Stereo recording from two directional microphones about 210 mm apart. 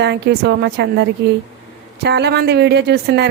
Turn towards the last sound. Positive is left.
turn(degrees=-50)  # may be behind; listen again after turning